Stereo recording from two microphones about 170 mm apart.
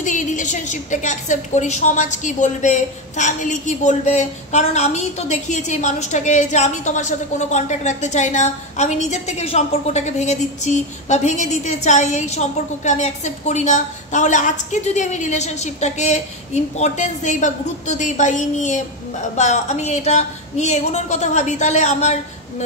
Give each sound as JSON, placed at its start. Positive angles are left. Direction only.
{"t": 0.0, "sound": "a woman's voice", "side_deg": 45}